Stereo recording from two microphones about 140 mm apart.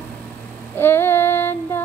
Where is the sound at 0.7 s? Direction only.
15° left (ahead or behind).